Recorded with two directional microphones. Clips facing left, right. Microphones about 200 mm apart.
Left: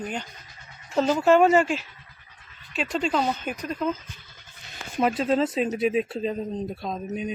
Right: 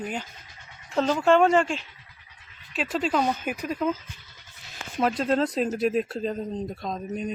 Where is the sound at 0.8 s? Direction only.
5° left (ahead or behind).